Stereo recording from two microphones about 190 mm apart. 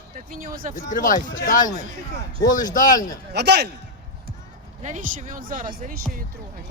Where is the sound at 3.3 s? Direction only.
60° right (ahead or behind).